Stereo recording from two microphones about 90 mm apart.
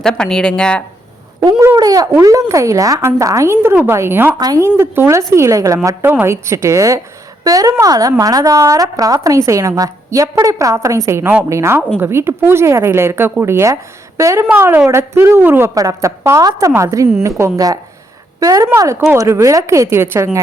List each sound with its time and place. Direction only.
0.0 s speech: 5° left (ahead or behind)
1.4 s a woman's voice: 45° right (ahead or behind); by 4.4 s 25° right (ahead or behind)
4.4 s a woman's voice: 50° right (ahead or behind)
4.6 s a woman's voice: 30° right (ahead or behind)
6.1 s a woman's voice: 25° right (ahead or behind)
15.7 s a woman's voice: 40° right (ahead or behind)